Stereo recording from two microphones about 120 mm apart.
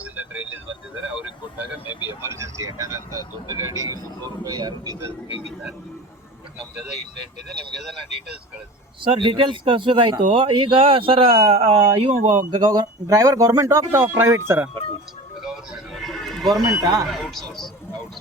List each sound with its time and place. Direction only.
0.0 s a sound: 15° right (ahead or behind)
1.1 s vehicle: 10° right (ahead or behind)
2.0 s speech: 20° right (ahead or behind)
9.0 s speech: 40° right (ahead or behind); by 12.5 s 60° right (ahead or behind)
12.5 s speech: 35° right (ahead or behind)
15.4 s horse: 5° right (ahead or behind)
16.8 s speech: 30° right (ahead or behind)
17.1 s speech: centre (ahead or behind)